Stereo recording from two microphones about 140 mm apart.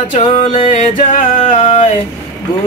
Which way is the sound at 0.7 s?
70° left (ahead or behind).